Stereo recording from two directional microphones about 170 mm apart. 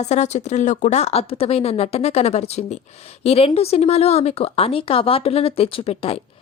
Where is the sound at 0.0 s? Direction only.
40° left (ahead or behind).